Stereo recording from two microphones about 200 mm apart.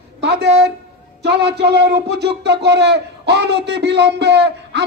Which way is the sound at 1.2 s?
55° right (ahead or behind).